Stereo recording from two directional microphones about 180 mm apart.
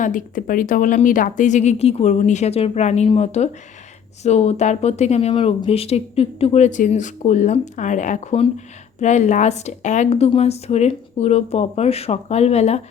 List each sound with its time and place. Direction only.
0.0 s speech: 45° left (ahead or behind)